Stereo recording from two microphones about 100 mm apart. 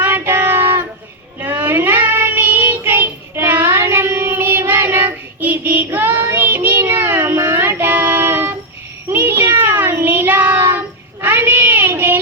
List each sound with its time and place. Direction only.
0.0 s child singing: 20° right (ahead or behind)